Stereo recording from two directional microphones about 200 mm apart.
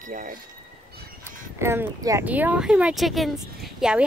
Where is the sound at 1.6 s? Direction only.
10° right (ahead or behind).